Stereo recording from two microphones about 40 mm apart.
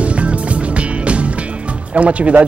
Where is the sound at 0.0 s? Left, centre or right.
Right.